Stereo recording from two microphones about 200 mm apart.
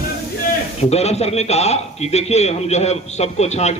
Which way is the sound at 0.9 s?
30° left (ahead or behind).